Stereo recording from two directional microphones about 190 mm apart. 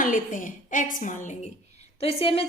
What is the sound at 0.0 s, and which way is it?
A woman's voice, 45° left (ahead or behind).